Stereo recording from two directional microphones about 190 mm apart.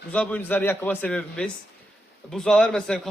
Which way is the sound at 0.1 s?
5° left (ahead or behind).